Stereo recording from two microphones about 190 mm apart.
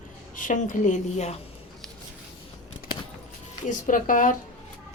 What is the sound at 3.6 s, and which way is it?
Speech, 45° left (ahead or behind).